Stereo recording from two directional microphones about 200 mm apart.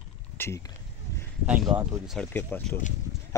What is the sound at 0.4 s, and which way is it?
Speech, 15° left (ahead or behind).